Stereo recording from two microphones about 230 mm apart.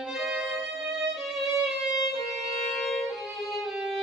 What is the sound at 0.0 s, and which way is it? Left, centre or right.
Music, centre.